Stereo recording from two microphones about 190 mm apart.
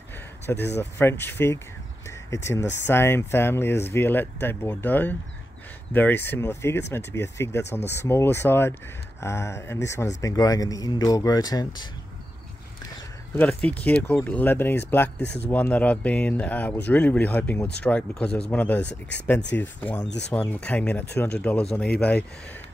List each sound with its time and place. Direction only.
0.7 s speech: 10° left (ahead or behind)
13.4 s speech: 5° left (ahead or behind)
18.9 s speech: 65° left (ahead or behind)
19.5 s speech: 10° left (ahead or behind)